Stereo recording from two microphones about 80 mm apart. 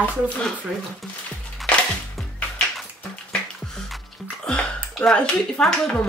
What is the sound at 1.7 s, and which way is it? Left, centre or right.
Music, centre.